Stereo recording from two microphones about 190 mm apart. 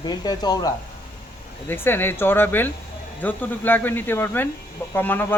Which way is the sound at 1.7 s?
10° left (ahead or behind).